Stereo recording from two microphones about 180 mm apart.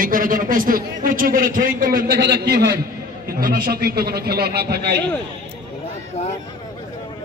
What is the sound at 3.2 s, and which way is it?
A man's voice, 55° right (ahead or behind).